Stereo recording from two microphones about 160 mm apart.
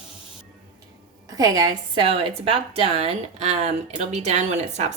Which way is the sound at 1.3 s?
25° right (ahead or behind).